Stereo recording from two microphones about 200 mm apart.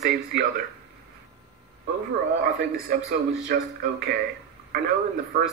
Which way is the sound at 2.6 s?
50° right (ahead or behind).